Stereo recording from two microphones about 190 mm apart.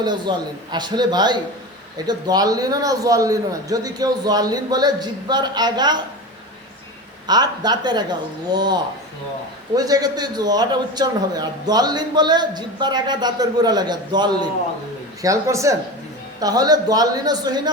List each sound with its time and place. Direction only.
0.0 s a man's voice: 25° right (ahead or behind)
7.3 s a man's voice: 20° right (ahead or behind)